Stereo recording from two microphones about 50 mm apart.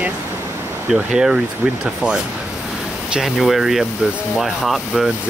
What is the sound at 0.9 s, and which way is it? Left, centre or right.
Speech, centre.